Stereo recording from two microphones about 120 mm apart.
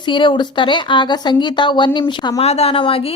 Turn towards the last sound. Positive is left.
turn(degrees=50)  # may be behind; listen again after turning